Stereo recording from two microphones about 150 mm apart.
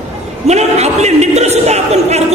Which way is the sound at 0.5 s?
45° right (ahead or behind).